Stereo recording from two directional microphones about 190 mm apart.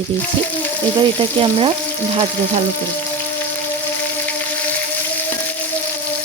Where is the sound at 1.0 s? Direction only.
25° right (ahead or behind).